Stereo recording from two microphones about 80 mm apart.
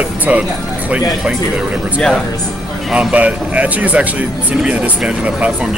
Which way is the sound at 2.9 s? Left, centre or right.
Centre.